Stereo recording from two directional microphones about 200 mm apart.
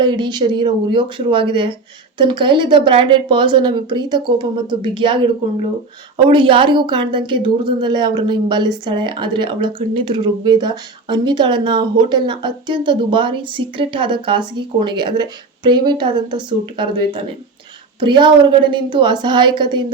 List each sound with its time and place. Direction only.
0.0 s speech: 20° right (ahead or behind)